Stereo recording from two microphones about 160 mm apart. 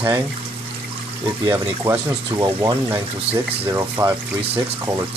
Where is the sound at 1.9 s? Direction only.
30° right (ahead or behind).